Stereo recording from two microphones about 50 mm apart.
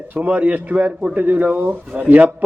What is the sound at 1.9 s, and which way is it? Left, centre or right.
Speech, right.